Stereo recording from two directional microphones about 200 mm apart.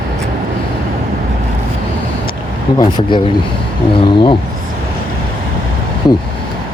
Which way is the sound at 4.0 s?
25° left (ahead or behind).